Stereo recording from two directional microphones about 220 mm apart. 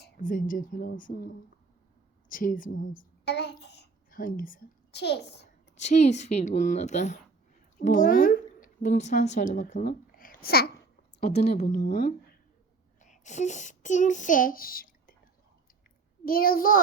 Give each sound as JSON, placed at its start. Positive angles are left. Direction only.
{"t": 0.0, "sound": "speech", "side_deg": 40}
{"t": 2.3, "sound": "a child's voice", "side_deg": 40}
{"t": 5.8, "sound": "speech", "side_deg": 30}
{"t": 9.8, "sound": "babbling", "side_deg": 40}
{"t": 11.2, "sound": "a woman's voice", "side_deg": 45}
{"t": 13.0, "sound": "a child's voice", "side_deg": 35}
{"t": 16.2, "sound": "speech", "side_deg": 40}